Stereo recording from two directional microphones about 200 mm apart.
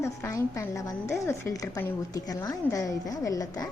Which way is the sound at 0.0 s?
15° left (ahead or behind).